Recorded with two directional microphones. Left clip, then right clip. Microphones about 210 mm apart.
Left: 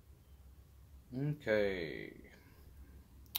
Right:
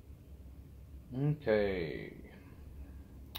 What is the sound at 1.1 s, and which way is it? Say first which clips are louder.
Speech: right 3 dB; 35° left (ahead or behind).